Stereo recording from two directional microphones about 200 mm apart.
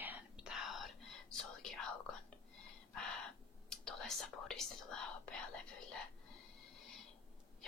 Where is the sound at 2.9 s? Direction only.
5° left (ahead or behind).